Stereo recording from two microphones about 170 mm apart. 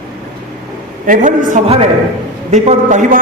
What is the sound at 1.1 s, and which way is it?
A man's voice, 45° right (ahead or behind).